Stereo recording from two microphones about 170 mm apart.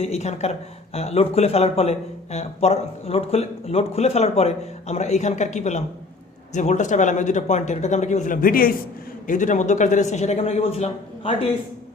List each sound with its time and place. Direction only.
0.0 s a man's voice: 40° left (ahead or behind)